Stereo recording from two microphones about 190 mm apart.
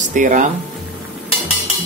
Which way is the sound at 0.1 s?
40° right (ahead or behind).